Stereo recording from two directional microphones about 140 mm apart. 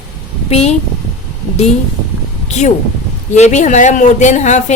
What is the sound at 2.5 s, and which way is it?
A woman's voice, 55° left (ahead or behind).